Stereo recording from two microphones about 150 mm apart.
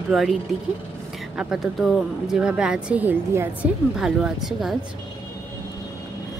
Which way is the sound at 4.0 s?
5° right (ahead or behind).